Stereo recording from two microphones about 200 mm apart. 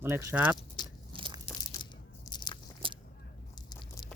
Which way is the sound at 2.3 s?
20° left (ahead or behind).